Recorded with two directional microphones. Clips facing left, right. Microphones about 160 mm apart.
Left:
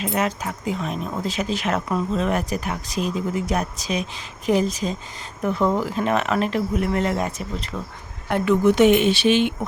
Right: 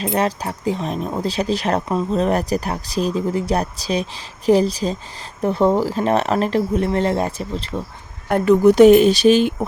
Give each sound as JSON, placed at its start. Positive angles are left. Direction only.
{"t": 0.0, "sound": "speech", "side_deg": -35}